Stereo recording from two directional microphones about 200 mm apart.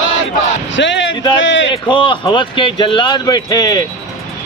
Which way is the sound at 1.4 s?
65° left (ahead or behind).